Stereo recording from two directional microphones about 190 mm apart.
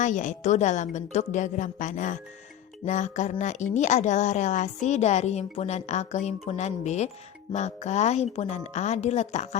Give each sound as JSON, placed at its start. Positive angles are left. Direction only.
{"t": 0.0, "sound": "a woman's voice", "side_deg": 40}